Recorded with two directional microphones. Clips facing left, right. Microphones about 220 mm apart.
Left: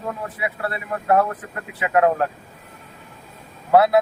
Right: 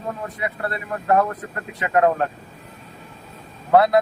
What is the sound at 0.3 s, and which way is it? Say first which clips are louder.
Speech: even; 5° left (ahead or behind).